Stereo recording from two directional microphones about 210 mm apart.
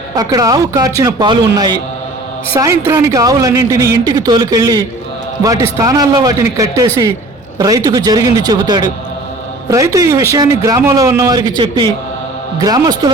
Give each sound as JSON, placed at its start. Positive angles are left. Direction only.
{"t": 0.2, "sound": "speech", "side_deg": -15}